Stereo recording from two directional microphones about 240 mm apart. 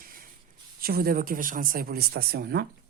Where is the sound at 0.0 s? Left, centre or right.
Right.